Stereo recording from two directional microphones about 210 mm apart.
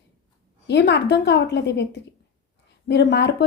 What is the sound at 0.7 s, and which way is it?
A woman's voice, 55° left (ahead or behind).